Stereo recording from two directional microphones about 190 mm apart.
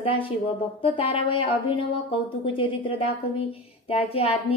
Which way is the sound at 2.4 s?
30° left (ahead or behind).